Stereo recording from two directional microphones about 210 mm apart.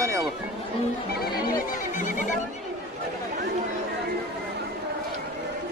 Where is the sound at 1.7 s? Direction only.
35° left (ahead or behind).